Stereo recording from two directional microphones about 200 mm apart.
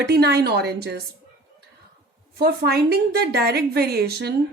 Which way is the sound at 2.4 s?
50° right (ahead or behind).